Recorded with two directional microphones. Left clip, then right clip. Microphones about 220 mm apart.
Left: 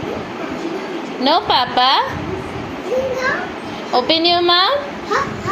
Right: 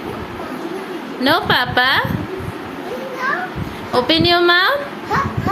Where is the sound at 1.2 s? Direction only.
20° right (ahead or behind).